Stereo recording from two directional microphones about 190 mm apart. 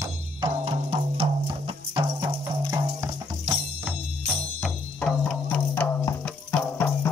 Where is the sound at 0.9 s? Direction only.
30° right (ahead or behind).